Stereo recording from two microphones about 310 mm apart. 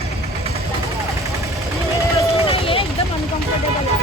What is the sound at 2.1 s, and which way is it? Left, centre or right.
Run, centre.